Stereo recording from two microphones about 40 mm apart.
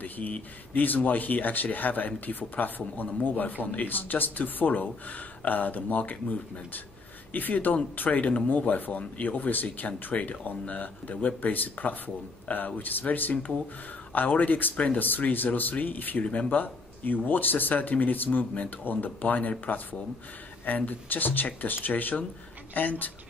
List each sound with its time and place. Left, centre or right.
0.0 s speech: left
7.3 s speech: left
10.1 s speech: left